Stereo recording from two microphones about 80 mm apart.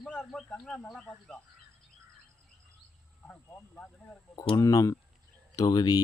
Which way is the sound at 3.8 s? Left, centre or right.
Centre.